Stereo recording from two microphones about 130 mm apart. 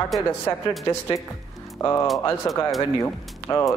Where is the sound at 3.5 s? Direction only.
30° left (ahead or behind).